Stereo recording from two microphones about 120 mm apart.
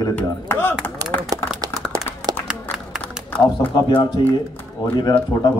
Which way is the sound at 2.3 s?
35° right (ahead or behind).